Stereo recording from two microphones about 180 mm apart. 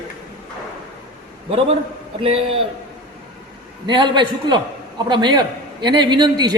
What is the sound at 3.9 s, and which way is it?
A man's voice, 25° right (ahead or behind).